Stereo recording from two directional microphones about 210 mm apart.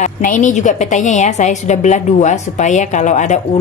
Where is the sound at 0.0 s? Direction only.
35° left (ahead or behind).